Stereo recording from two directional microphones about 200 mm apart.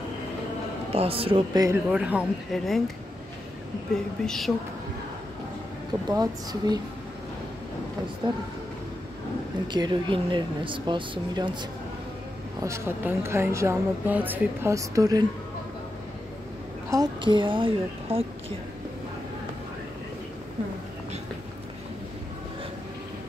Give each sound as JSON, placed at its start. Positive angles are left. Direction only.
{"t": 0.9, "sound": "speech", "side_deg": -30}
{"t": 1.9, "sound": "speech", "side_deg": -5}
{"t": 3.9, "sound": "speech", "side_deg": 5}
{"t": 6.0, "sound": "speech", "side_deg": -20}
{"t": 9.7, "sound": "speech", "side_deg": -20}
{"t": 12.6, "sound": "a woman's voice", "side_deg": -10}
{"t": 16.9, "sound": "speech", "side_deg": -20}